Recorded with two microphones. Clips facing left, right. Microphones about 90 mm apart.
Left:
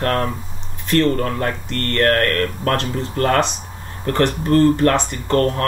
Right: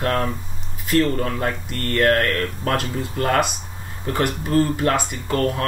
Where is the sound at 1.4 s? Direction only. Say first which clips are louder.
Left 2 dB; 60° left (ahead or behind).